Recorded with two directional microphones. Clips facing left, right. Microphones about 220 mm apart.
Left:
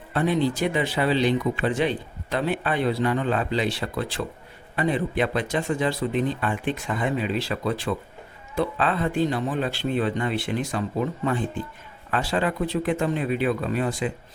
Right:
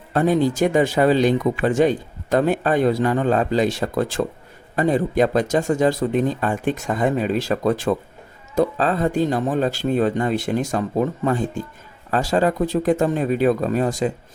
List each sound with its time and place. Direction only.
0.1 s speech: 45° right (ahead or behind)